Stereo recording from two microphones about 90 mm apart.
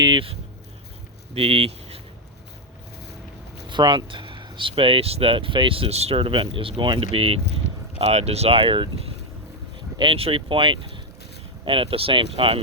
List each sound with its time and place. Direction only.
0.0 s speech: 70° right (ahead or behind)
1.3 s speech: 90° right
3.7 s speech: 60° right (ahead or behind)
10.0 s speech: 85° right; by 11.0 s 65° right (ahead or behind)
11.6 s speech: 80° right